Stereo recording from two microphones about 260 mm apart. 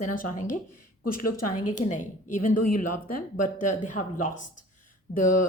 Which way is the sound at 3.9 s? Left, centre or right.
Left.